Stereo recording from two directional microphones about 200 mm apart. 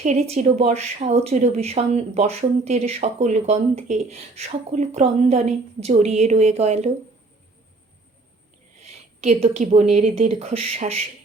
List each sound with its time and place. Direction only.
0.0 s speech: 35° right (ahead or behind)
9.2 s speech: 35° right (ahead or behind)